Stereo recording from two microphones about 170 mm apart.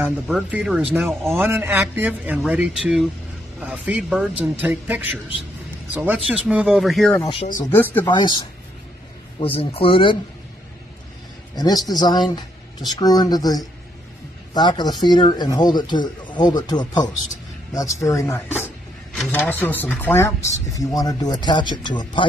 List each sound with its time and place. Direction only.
0.0 s speech: 10° right (ahead or behind)
7.6 s speech: 10° left (ahead or behind)
8.1 s speech: 25° left (ahead or behind)
9.4 s speech: 35° left (ahead or behind)
11.5 s speech: 25° left (ahead or behind)